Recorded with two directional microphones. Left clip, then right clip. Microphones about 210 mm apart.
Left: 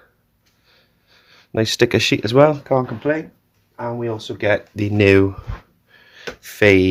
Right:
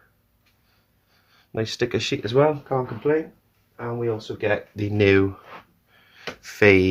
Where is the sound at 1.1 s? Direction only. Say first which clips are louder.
Left 7 dB; 25° left (ahead or behind); by 3.1 s 45° left (ahead or behind).